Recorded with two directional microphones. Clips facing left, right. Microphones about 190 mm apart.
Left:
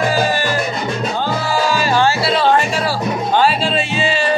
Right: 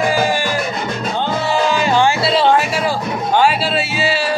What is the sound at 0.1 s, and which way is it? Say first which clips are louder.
Music: even; 15° right (ahead or behind).